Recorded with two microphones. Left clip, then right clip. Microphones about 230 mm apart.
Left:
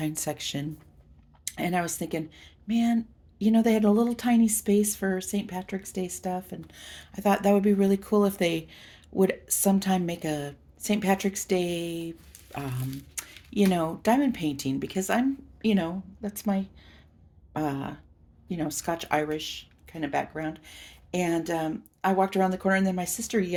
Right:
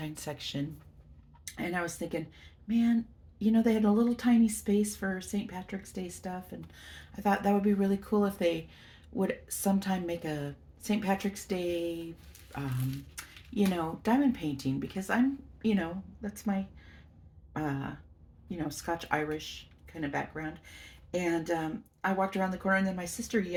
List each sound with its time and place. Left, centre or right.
0.0 s speech: left
13.1 s speech: left
17.5 s throat clearing: left
18.4 s speech: left